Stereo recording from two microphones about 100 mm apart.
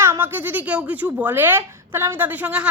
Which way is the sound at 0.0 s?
25° right (ahead or behind).